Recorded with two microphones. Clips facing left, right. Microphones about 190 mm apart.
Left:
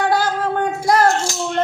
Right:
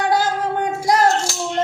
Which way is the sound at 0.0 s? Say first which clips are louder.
Left 1 dB; 20° right (ahead or behind).